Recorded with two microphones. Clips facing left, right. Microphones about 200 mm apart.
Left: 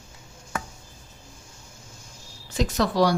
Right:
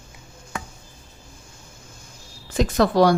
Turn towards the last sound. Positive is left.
turn(degrees=-55)  # may be behind; listen again after turning